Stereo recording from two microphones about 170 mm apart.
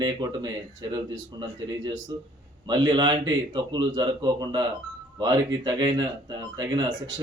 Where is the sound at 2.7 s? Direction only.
25° right (ahead or behind).